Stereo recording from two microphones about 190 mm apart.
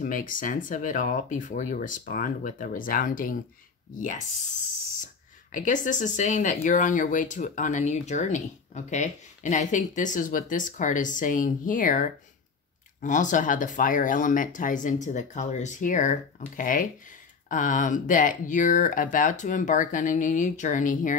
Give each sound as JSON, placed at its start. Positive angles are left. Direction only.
{"t": 0.0, "sound": "speech", "side_deg": 45}
{"t": 5.0, "sound": "speech", "side_deg": 40}